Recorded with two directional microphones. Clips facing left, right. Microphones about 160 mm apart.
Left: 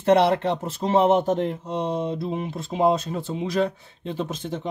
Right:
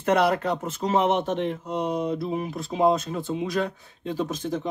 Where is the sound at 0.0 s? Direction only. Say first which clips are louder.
Left 3 dB; 30° left (ahead or behind).